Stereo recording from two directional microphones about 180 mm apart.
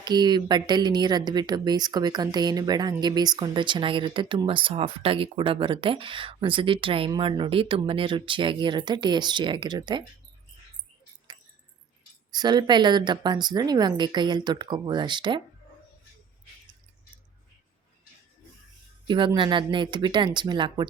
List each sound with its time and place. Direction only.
0.0 s speech: 25° right (ahead or behind)
12.3 s speech: 25° right (ahead or behind)
19.0 s speech: 25° right (ahead or behind)